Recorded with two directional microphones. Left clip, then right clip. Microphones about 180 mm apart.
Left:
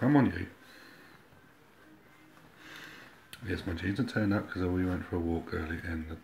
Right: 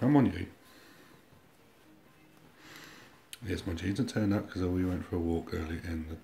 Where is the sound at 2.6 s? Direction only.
10° right (ahead or behind).